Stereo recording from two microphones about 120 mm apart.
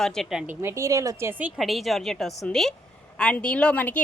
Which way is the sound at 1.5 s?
Centre (ahead or behind).